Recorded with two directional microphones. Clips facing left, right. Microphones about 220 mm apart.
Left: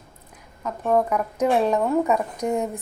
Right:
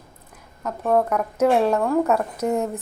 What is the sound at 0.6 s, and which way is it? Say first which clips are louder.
A woman's voice: right 1 dB; 5° right (ahead or behind).